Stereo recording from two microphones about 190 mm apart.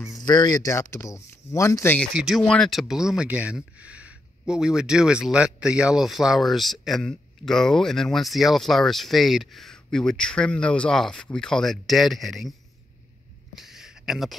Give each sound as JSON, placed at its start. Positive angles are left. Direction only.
{"t": 0.0, "sound": "speech", "side_deg": 20}
{"t": 2.1, "sound": "speech", "side_deg": 0}
{"t": 13.6, "sound": "a sound", "side_deg": 0}